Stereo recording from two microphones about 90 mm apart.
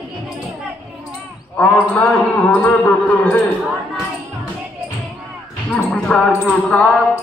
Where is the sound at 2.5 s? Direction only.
15° left (ahead or behind).